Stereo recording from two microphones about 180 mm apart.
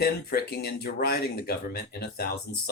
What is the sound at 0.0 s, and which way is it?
Speech, 60° left (ahead or behind).